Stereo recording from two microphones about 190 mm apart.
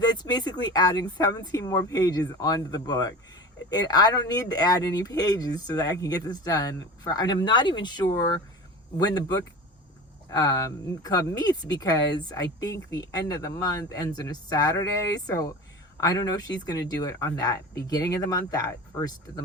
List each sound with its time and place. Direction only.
0.0 s speech: 20° left (ahead or behind)
10.3 s speech: 20° left (ahead or behind)
16.0 s speech: 20° left (ahead or behind)